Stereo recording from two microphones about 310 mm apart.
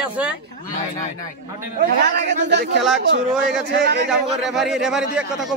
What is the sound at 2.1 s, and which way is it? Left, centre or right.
A man's voice, right.